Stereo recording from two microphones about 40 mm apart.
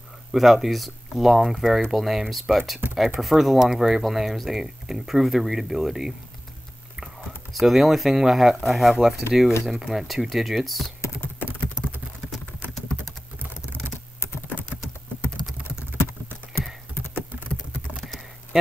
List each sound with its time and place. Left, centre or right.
0.3 s speech: centre
7.5 s speech: centre
11.8 s typing: right